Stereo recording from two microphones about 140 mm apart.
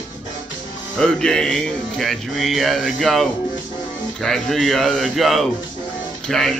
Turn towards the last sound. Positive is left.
turn(degrees=0)  # may be behind; listen again after turning